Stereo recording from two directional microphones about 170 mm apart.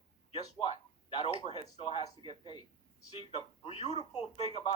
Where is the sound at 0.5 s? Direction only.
30° left (ahead or behind).